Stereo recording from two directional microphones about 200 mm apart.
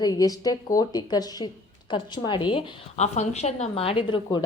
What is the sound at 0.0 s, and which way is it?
A woman's voice, 20° left (ahead or behind).